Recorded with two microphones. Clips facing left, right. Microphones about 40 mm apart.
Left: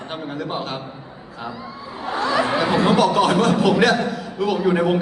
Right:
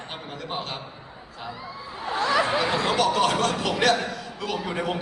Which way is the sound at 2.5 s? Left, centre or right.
Centre.